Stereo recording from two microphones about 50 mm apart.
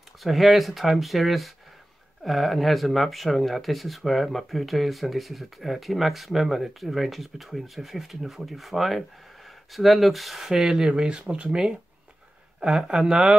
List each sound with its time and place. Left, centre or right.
0.2 s speech: centre